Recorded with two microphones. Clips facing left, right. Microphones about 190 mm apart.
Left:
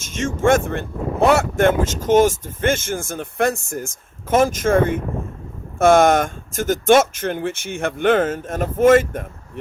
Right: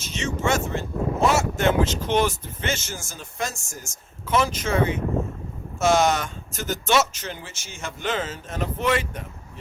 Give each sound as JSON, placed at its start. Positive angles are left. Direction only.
{"t": 0.0, "sound": "speech", "side_deg": 50}